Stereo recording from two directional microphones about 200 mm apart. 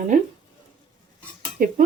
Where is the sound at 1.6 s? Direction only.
45° right (ahead or behind).